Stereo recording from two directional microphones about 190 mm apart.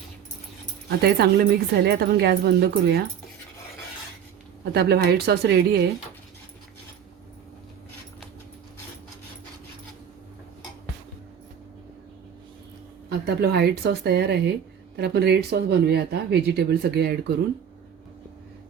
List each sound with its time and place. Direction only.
0.9 s speech: 55° right (ahead or behind)
4.6 s speech: 55° right (ahead or behind)
13.1 s speech: 60° right (ahead or behind)